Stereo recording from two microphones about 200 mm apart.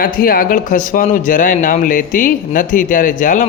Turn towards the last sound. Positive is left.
turn(degrees=40)  # may be behind; listen again after turning